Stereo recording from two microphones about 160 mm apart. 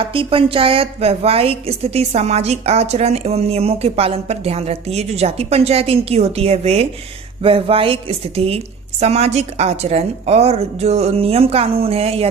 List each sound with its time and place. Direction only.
0.1 s a woman's voice: 35° right (ahead or behind)